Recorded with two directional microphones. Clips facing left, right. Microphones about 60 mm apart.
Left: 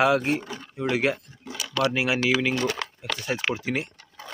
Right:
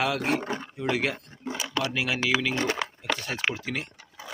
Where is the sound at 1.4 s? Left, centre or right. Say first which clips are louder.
Left 1 dB; right.